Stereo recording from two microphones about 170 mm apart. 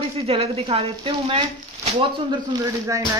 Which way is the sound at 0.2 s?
35° right (ahead or behind).